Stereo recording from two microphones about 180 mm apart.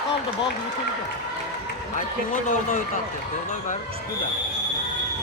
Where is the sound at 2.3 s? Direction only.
50° left (ahead or behind).